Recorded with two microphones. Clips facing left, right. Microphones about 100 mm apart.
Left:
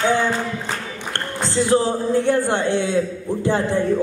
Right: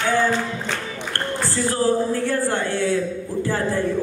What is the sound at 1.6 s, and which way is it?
Speech, 20° left (ahead or behind).